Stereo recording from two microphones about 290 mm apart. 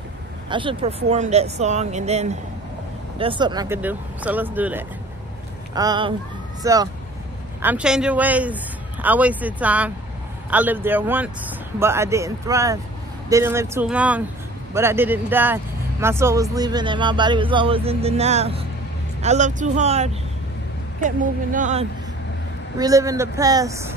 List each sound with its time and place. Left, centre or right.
0.5 s speech: centre
22.8 s speech: centre